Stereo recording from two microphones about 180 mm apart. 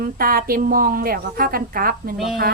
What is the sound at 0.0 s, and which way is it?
A woman's voice, 55° right (ahead or behind).